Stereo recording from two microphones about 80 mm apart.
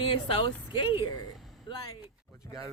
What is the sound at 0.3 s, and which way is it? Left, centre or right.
Speech, left.